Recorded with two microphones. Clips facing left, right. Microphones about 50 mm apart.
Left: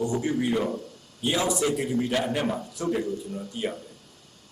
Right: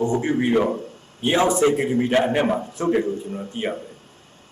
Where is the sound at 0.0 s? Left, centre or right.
Right.